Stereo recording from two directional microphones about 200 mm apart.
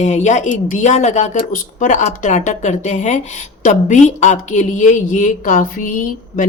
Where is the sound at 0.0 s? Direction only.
35° left (ahead or behind).